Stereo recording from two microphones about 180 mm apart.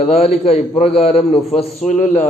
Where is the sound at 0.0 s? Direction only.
35° left (ahead or behind).